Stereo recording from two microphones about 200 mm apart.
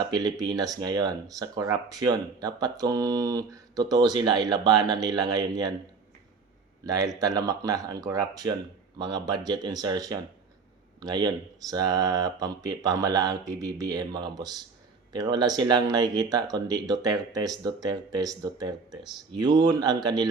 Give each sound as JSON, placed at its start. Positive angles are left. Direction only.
{"t": 0.0, "sound": "speech", "side_deg": -20}
{"t": 6.8, "sound": "speech", "side_deg": -20}